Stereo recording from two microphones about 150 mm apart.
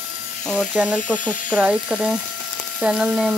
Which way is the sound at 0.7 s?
5° right (ahead or behind).